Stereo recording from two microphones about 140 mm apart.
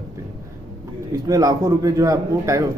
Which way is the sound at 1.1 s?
25° right (ahead or behind).